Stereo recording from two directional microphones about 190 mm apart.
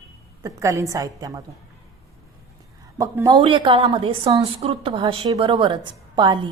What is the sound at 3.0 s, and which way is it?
A woman's voice, 20° right (ahead or behind).